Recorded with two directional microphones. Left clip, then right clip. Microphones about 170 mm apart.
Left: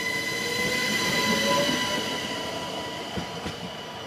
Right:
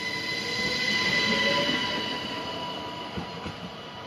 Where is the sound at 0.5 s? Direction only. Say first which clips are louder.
Even; 40° left (ahead or behind).